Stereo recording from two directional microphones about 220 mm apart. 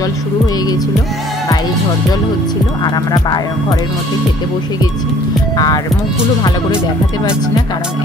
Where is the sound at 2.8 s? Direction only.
15° left (ahead or behind).